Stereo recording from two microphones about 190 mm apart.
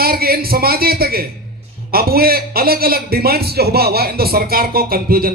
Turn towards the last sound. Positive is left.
turn(degrees=-50)  # may be behind; listen again after turning